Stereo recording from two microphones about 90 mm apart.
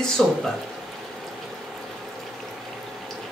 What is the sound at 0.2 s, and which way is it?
Speech, centre (ahead or behind).